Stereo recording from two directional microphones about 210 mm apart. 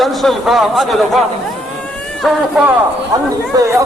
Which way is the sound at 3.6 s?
15° right (ahead or behind).